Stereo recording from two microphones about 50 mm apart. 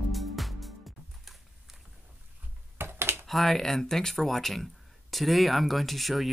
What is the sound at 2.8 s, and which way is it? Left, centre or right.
Computer keyboard, right.